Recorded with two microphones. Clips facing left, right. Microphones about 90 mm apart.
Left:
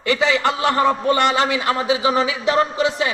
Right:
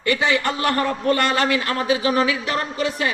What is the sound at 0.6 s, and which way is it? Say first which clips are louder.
A man's voice: left 4 dB; 20° left (ahead or behind).